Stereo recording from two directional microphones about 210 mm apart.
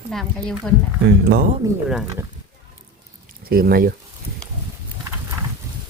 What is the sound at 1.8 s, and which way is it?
Speech, 5° right (ahead or behind).